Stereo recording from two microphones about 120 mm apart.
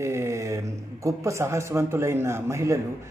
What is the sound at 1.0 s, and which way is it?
Speech, 25° right (ahead or behind).